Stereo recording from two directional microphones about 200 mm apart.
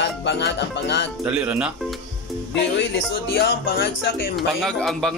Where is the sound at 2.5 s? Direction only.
55° left (ahead or behind).